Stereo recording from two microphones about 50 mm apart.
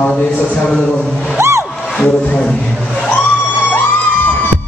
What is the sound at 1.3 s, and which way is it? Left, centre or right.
Music, right.